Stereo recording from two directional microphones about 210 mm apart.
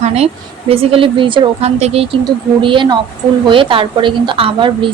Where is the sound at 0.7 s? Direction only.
25° right (ahead or behind).